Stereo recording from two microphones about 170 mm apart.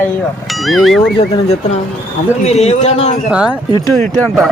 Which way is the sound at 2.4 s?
40° left (ahead or behind).